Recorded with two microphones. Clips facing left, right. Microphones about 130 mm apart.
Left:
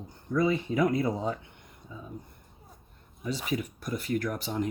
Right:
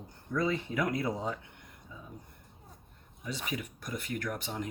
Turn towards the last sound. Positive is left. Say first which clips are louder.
# left 6 dB
turn(degrees=35)  # may be behind; listen again after turning